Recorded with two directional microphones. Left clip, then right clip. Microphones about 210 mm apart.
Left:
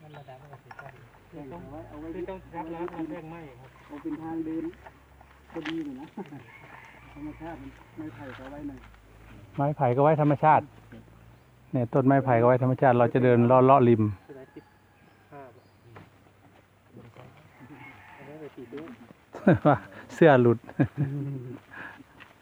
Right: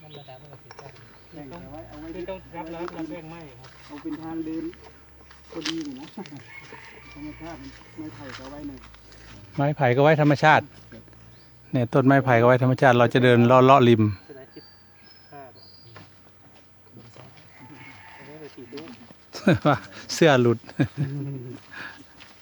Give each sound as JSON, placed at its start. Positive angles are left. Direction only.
{"t": 2.1, "sound": "speech", "side_deg": -10}
{"t": 6.2, "sound": "speech", "side_deg": -15}
{"t": 8.3, "sound": "speech", "side_deg": 0}
{"t": 9.6, "sound": "speech", "side_deg": -30}
{"t": 11.7, "sound": "speech", "side_deg": -20}
{"t": 15.3, "sound": "cricket", "side_deg": 30}
{"t": 18.7, "sound": "a sound", "side_deg": 25}
{"t": 19.3, "sound": "speech", "side_deg": 0}
{"t": 21.7, "sound": "a sound", "side_deg": -5}